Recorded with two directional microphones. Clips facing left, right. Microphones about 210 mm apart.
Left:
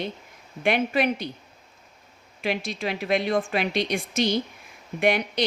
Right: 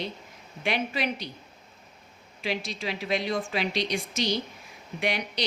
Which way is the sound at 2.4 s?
55° left (ahead or behind).